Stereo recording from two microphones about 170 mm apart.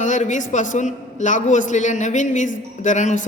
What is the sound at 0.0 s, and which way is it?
A man's voice, 45° left (ahead or behind).